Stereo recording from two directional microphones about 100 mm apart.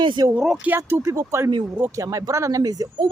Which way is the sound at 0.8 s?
30° right (ahead or behind).